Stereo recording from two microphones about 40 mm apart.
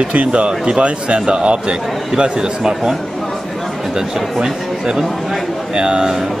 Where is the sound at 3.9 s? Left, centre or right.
Centre.